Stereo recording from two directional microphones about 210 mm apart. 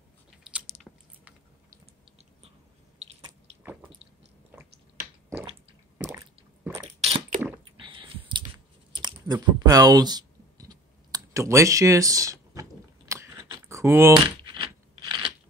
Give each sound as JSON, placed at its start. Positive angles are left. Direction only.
{"t": 0.4, "sound": "biting", "side_deg": -5}
{"t": 0.9, "sound": "chewing", "side_deg": 5}
{"t": 4.5, "sound": "chewing", "side_deg": -10}
{"t": 6.6, "sound": "a sound", "side_deg": -10}
{"t": 7.0, "sound": "a sound", "side_deg": -25}
{"t": 8.9, "sound": "clicking", "side_deg": -20}